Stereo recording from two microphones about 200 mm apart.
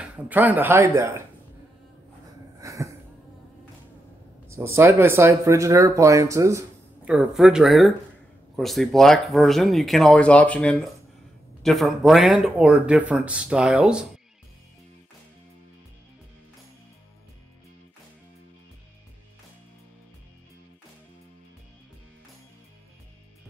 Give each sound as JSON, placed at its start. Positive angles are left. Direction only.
{"t": 0.0, "sound": "speech", "side_deg": -10}
{"t": 2.6, "sound": "a sound", "side_deg": -15}
{"t": 4.5, "sound": "speech", "side_deg": -15}
{"t": 7.1, "sound": "speech", "side_deg": 0}